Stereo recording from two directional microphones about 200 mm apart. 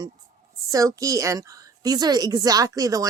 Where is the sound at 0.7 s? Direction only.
15° right (ahead or behind).